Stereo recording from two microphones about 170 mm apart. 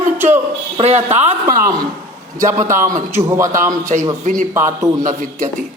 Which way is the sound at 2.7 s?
50° right (ahead or behind).